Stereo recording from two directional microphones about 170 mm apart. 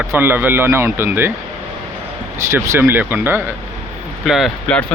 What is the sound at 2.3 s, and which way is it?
Speech, 15° right (ahead or behind).